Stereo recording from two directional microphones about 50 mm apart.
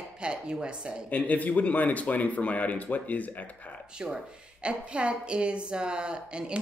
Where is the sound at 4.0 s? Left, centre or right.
Centre.